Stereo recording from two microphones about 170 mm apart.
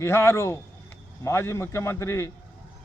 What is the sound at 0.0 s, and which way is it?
A man's voice, 15° left (ahead or behind).